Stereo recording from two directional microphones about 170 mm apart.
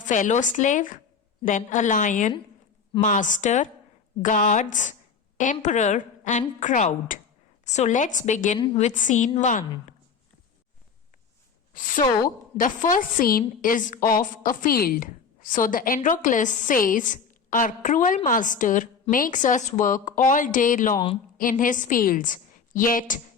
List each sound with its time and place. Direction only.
0.0 s a woman's voice: 45° left (ahead or behind)
8.5 s a woman's voice: 30° left (ahead or behind)
8.8 s a woman's voice: 50° left (ahead or behind)
11.7 s a woman's voice: 50° left (ahead or behind)